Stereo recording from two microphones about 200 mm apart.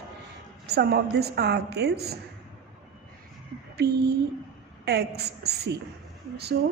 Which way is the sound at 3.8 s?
55° right (ahead or behind).